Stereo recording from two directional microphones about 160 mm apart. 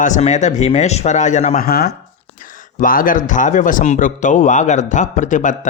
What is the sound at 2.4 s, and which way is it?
Speech, 55° left (ahead or behind).